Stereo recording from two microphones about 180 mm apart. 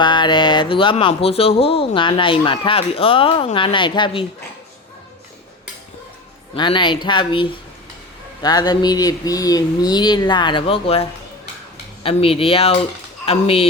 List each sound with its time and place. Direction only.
0.0 s speech: 25° left (ahead or behind)
6.5 s speech: 25° left (ahead or behind)